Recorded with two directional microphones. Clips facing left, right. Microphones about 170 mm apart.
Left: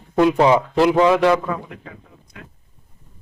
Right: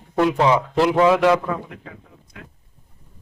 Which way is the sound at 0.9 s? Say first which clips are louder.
Right 1 dB; 5° right (ahead or behind).